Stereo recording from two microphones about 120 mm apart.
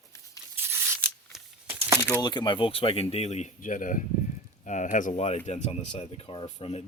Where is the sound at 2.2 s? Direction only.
40° left (ahead or behind); by 5.4 s 65° left (ahead or behind).